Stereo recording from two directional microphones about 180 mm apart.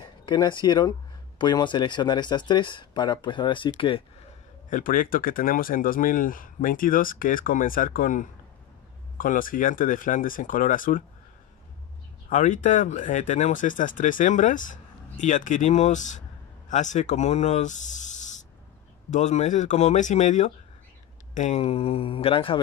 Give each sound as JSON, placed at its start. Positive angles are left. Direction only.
{"t": 0.0, "sound": "speech", "side_deg": 25}
{"t": 4.6, "sound": "speech", "side_deg": 45}
{"t": 12.3, "sound": "speech", "side_deg": 45}